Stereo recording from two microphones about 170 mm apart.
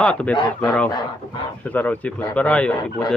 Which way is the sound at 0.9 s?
25° left (ahead or behind).